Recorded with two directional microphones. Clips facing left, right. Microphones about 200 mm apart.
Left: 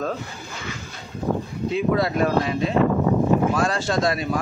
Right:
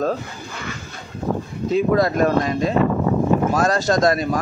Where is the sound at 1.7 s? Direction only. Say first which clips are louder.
Right 4 dB; 40° right (ahead or behind).